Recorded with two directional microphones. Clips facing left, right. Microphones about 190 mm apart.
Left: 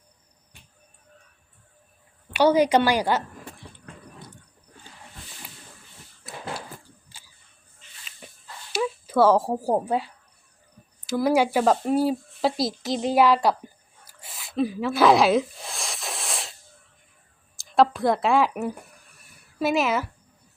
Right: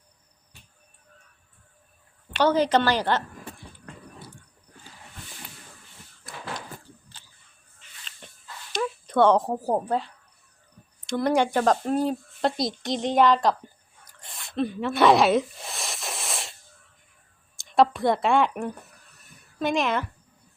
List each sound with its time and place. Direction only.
2.3 s a woman's voice: 10° left (ahead or behind)
4.2 s a sound: 10° right (ahead or behind)
7.2 s single-lens reflex camera: 10° left (ahead or behind)
8.2 s dog: 5° left (ahead or behind)
8.7 s speech: 5° left (ahead or behind)
17.6 s speech: centre (ahead or behind)